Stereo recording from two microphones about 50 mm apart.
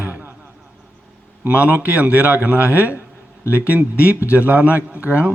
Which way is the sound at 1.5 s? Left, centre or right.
Right.